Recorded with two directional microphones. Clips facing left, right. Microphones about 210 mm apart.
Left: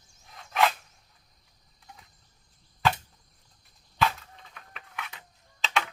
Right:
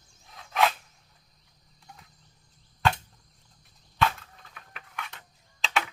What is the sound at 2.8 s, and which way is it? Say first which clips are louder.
Arrow: even; centre (ahead or behind).